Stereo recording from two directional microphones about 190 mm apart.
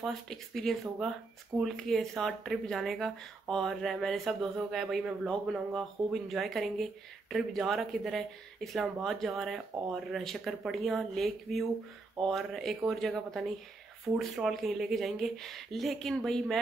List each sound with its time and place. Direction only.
0.0 s speech: centre (ahead or behind)